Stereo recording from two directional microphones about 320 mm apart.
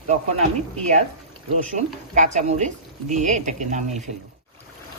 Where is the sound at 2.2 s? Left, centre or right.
Right.